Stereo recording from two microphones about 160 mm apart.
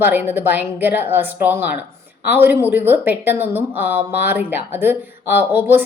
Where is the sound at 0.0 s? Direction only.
10° right (ahead or behind).